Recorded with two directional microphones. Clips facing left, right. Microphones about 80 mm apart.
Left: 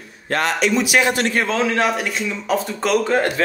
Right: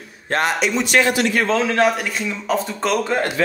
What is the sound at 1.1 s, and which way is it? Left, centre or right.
Speech, left.